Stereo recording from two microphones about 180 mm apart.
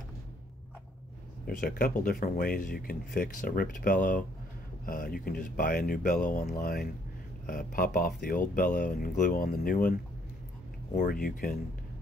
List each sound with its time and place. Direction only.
1.6 s speech: 50° left (ahead or behind)